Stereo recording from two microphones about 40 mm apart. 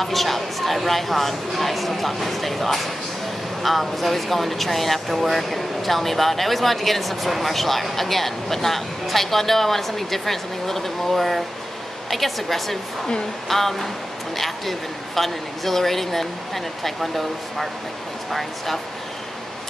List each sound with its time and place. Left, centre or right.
0.0 s speech: centre